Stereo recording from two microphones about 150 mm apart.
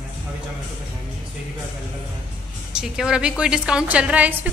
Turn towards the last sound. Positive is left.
turn(degrees=-10)  # may be behind; listen again after turning